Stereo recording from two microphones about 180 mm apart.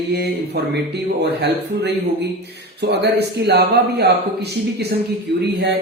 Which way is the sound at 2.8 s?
65° right (ahead or behind).